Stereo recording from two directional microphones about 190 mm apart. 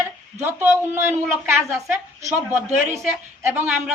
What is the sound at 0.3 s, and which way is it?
A woman's voice, 15° right (ahead or behind).